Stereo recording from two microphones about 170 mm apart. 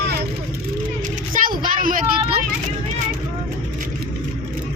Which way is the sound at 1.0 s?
50° right (ahead or behind).